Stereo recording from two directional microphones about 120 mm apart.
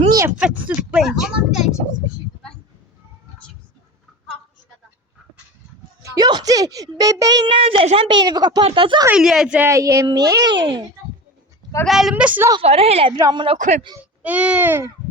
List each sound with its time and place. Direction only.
0.3 s a sound: 10° right (ahead or behind)
6.0 s a child's voice: 35° right (ahead or behind)
7.6 s a woman's voice: 50° right (ahead or behind)
9.1 s speech: 5° right (ahead or behind)
9.6 s a woman's voice: 25° right (ahead or behind); by 10.8 s 40° right (ahead or behind)
11.9 s speech: centre (ahead or behind)
12.1 s a woman's voice: 10° right (ahead or behind)
12.6 s a woman's voice: 60° right (ahead or behind)
13.1 s a woman's voice: 30° right (ahead or behind)
13.6 s speech: 80° right
14.0 s speech: 10° right (ahead or behind)